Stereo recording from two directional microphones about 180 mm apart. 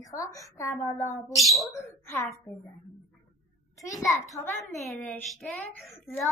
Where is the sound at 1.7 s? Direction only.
15° left (ahead or behind).